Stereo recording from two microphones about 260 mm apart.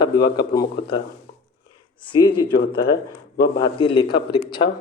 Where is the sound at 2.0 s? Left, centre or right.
Centre.